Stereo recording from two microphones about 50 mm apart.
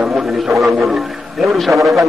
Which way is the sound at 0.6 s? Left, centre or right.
Centre.